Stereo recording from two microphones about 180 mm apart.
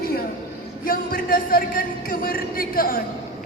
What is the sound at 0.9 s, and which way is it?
A man's voice, 55° left (ahead or behind).